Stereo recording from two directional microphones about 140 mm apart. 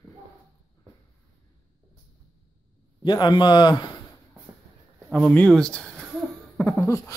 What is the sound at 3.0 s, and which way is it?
Speech, 30° left (ahead or behind).